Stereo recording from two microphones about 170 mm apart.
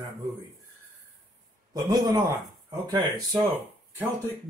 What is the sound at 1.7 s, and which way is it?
Speech, 25° right (ahead or behind).